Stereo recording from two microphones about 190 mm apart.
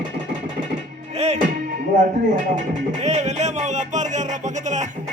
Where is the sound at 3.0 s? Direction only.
35° right (ahead or behind).